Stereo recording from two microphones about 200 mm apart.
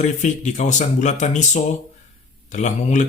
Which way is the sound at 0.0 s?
35° left (ahead or behind).